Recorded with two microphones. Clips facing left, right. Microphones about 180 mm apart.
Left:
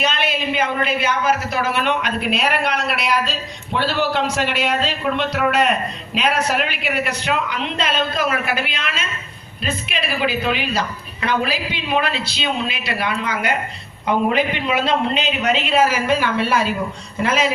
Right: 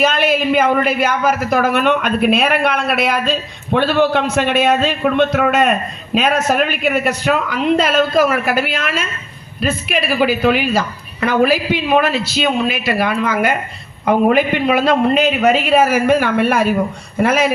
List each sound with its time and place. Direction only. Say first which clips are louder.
0.0 s a man's voice: right 7 dB; 50° right (ahead or behind)